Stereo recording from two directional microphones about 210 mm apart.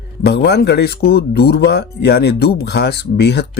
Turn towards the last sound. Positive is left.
turn(degrees=50)  # may be behind; listen again after turning